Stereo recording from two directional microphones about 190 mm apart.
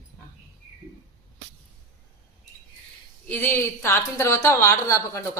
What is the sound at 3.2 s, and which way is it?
A woman's voice, 10° left (ahead or behind).